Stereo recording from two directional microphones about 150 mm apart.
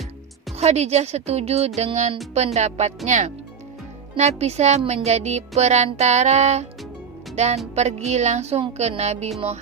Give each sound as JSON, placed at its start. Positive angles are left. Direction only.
{"t": 0.6, "sound": "speech", "side_deg": -45}